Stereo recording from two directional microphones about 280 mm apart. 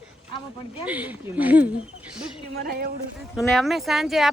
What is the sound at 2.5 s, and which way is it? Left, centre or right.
Speech, right.